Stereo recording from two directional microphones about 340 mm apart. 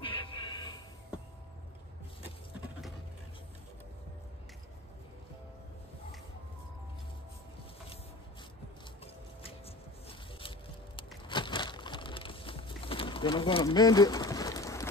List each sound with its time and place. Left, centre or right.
0.0 s music: centre
9.0 s music: centre
11.2 s crushing: centre